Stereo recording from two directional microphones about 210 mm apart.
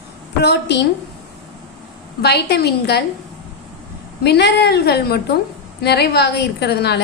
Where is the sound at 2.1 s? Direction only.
50° left (ahead or behind).